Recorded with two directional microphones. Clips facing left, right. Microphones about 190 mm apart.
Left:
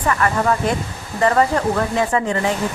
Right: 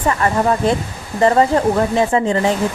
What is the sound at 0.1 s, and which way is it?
Speech, 25° right (ahead or behind).